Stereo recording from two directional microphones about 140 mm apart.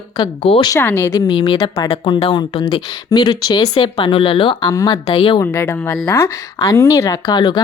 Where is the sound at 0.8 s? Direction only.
15° left (ahead or behind); by 5.4 s 40° left (ahead or behind).